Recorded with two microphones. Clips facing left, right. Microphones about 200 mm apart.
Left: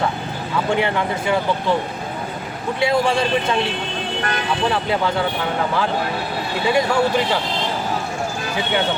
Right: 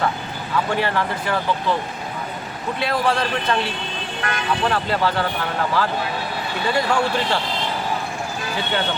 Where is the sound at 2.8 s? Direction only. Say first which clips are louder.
Left 3 dB; 15° left (ahead or behind).